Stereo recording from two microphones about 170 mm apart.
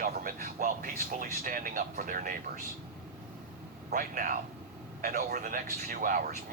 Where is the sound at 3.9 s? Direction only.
55° right (ahead or behind).